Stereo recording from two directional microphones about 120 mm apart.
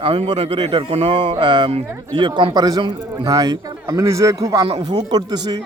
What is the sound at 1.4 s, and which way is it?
A man's voice, 40° right (ahead or behind).